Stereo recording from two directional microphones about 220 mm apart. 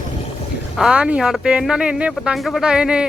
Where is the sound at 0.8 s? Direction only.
5° right (ahead or behind).